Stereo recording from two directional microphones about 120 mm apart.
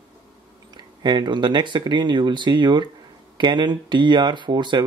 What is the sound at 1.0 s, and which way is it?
Speech, 40° right (ahead or behind).